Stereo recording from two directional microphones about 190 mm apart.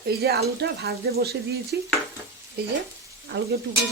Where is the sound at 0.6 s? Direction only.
55° right (ahead or behind).